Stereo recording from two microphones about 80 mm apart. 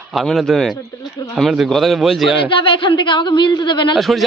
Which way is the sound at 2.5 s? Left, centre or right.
Left.